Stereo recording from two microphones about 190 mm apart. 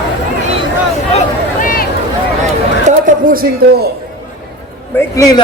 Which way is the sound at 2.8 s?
45° right (ahead or behind).